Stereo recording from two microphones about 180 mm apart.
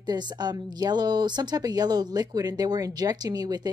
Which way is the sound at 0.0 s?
25° right (ahead or behind).